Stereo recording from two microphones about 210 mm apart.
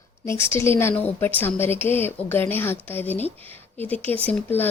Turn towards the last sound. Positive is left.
turn(degrees=10)  # may be behind; listen again after turning